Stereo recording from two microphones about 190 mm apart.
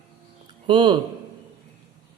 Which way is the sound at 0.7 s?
25° right (ahead or behind).